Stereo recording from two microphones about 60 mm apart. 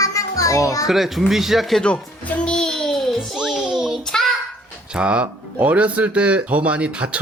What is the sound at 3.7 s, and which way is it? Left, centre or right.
Child singing, centre.